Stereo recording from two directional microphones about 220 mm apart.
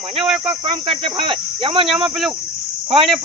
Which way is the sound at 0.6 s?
25° right (ahead or behind).